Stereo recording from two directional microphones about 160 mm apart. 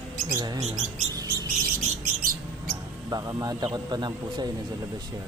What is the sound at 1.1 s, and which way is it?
Bird, 25° right (ahead or behind).